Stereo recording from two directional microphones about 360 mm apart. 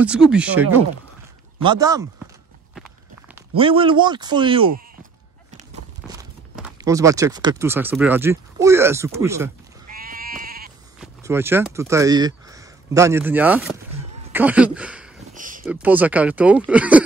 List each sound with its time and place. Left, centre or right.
0.3 s speech: centre
3.3 s speech: centre
9.8 s sheep: right
11.0 s speech: centre
15.3 s a sound: right
15.6 s speech: centre